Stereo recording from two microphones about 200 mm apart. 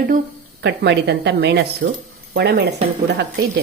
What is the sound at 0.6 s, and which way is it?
A woman's voice, 60° right (ahead or behind).